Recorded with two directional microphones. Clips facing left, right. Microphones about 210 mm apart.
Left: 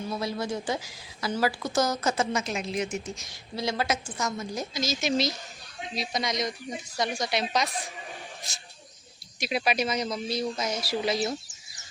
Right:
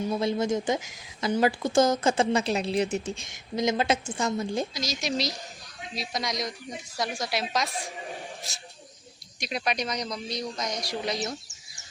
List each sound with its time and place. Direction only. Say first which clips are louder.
0.2 s a woman's voice: right 5 dB; 25° right (ahead or behind)
3.5 s a woman's voice: right 4 dB; 20° right (ahead or behind)
4.7 s a man's voice: left 3 dB; centre (ahead or behind)